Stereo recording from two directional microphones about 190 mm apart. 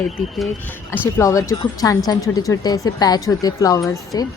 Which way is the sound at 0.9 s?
15° left (ahead or behind).